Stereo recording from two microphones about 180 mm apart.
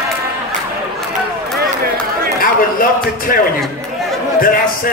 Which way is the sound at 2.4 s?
50° left (ahead or behind).